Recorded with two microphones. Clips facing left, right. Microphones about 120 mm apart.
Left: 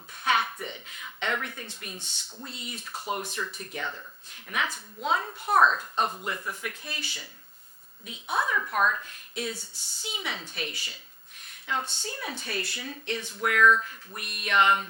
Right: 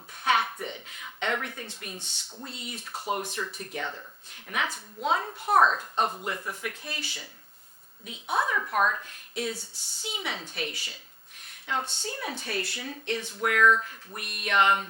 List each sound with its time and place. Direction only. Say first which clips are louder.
0.1 s a sound: right 1 dB; 45° right (ahead or behind)
2.5 s speech: even; 55° right (ahead or behind)
5.6 s a woman's voice: left 1 dB; 30° right (ahead or behind)
9.3 s speech: right 2 dB; 50° right (ahead or behind)
11.6 s a woman's voice: right 1 dB; 40° right (ahead or behind)
14.2 s speech: even; 55° right (ahead or behind)